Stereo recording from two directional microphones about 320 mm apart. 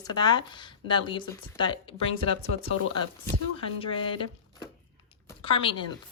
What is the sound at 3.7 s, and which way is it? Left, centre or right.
Speech, centre.